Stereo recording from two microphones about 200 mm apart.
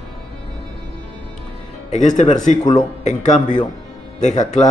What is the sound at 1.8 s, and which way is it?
A man's voice, 35° left (ahead or behind).